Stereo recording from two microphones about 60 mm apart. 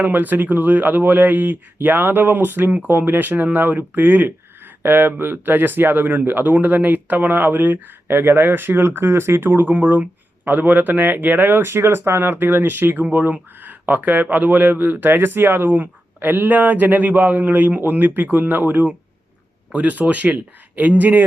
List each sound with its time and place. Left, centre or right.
0.0 s speech: right